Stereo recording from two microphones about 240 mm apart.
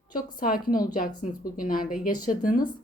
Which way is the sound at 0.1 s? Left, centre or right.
Left.